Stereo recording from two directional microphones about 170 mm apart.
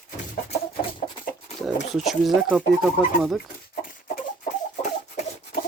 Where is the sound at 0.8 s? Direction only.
30° left (ahead or behind).